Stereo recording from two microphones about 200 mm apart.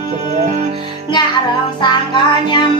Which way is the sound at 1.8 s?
20° left (ahead or behind).